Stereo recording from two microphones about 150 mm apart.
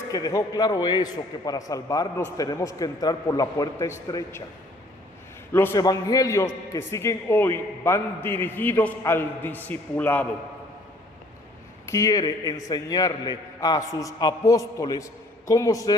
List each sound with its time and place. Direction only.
0.1 s a man's voice: 25° left (ahead or behind)
5.5 s a man's voice: 20° left (ahead or behind)
11.9 s a man's voice: 20° left (ahead or behind)